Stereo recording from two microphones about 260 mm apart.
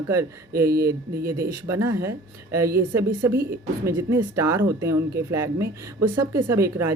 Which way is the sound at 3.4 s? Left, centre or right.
Right.